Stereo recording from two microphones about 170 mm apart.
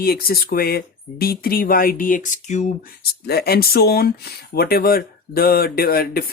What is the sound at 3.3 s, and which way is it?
Speech, 65° left (ahead or behind).